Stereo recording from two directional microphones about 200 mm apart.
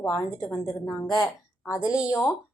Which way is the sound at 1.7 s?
5° right (ahead or behind).